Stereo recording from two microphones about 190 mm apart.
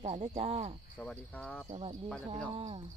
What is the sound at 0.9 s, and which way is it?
Cricket, 5° left (ahead or behind).